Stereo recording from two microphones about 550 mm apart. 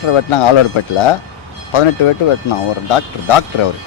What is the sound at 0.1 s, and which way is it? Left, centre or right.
Speech, left.